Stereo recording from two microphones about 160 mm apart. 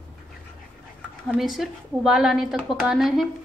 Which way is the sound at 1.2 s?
Centre (ahead or behind).